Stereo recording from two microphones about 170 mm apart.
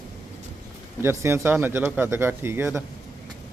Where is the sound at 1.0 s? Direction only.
15° right (ahead or behind).